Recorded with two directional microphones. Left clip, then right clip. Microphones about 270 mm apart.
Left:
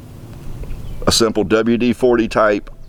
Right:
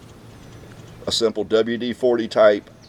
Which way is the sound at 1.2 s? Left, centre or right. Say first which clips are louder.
Left 1 dB; left.